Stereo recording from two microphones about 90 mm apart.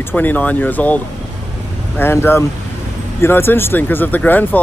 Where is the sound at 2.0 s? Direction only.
25° left (ahead or behind).